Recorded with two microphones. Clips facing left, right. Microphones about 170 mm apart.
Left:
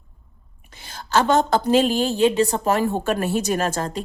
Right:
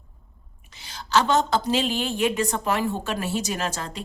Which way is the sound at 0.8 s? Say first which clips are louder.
Left 2 dB; 50° left (ahead or behind).